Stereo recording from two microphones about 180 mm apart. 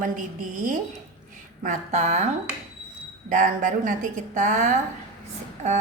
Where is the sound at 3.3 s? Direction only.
45° right (ahead or behind).